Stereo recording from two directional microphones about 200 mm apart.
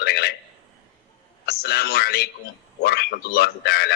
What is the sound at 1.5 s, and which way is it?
A man's voice, 55° left (ahead or behind).